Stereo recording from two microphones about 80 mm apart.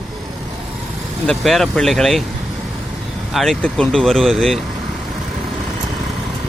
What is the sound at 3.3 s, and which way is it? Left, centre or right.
Speech, centre.